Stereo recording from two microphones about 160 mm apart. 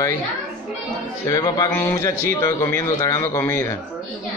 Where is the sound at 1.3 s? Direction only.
20° left (ahead or behind).